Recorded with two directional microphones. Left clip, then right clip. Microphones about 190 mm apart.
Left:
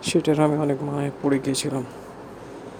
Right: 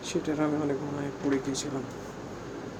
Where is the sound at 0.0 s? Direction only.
50° left (ahead or behind).